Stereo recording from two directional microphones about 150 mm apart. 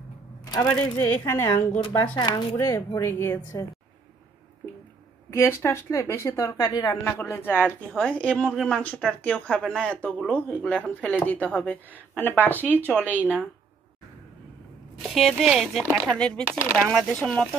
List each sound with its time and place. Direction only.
0.5 s a woman's voice: 15° left (ahead or behind)
2.1 s a woman's voice: 30° left (ahead or behind)
5.3 s a woman's voice: 15° left (ahead or behind)
13.1 s speech: 10° right (ahead or behind)
15.0 s speech: centre (ahead or behind)